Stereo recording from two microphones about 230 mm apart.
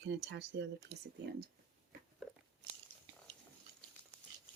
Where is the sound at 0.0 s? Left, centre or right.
Right.